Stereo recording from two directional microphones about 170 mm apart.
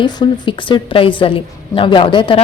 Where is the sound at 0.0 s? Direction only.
25° left (ahead or behind).